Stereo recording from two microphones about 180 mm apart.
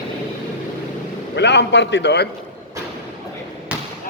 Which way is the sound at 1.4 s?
75° left (ahead or behind).